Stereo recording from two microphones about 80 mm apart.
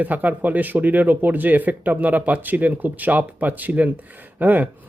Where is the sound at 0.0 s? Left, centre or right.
Right.